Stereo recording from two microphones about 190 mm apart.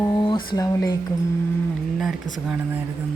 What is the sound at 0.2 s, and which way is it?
Speech, 25° left (ahead or behind).